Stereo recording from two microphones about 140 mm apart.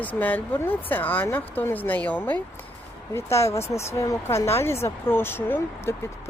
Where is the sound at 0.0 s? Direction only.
10° left (ahead or behind).